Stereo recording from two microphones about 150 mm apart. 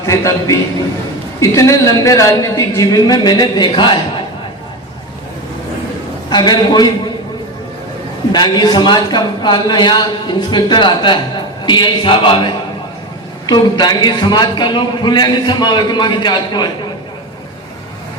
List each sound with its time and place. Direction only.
0.0 s a man's voice: 20° left (ahead or behind)
6.3 s a man's voice: 30° left (ahead or behind)
8.3 s a man's voice: 30° left (ahead or behind)